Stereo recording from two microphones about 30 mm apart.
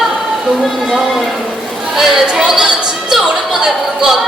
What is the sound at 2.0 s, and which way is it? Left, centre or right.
Chatter, centre.